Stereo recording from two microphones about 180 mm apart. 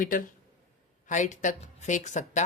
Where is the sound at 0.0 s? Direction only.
50° left (ahead or behind).